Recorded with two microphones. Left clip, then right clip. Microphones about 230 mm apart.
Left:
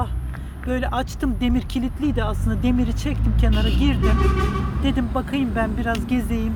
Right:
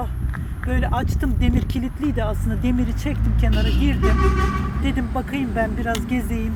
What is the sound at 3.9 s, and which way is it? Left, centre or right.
Speech, left.